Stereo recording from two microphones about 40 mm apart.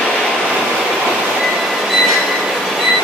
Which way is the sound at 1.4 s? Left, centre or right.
Centre.